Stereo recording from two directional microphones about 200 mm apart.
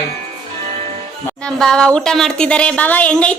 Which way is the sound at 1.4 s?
5° left (ahead or behind).